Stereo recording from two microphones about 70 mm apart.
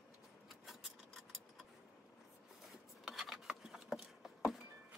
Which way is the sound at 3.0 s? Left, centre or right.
Centre.